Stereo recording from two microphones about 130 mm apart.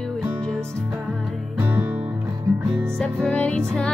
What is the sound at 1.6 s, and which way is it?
Music, 15° right (ahead or behind).